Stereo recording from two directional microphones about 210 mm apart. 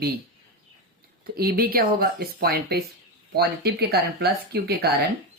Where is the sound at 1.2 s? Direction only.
45° right (ahead or behind).